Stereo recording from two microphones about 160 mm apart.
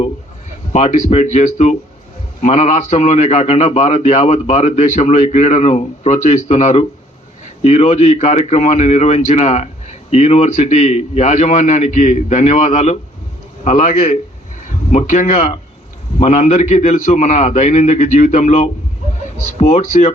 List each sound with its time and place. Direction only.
0.7 s a man's voice: 45° left (ahead or behind)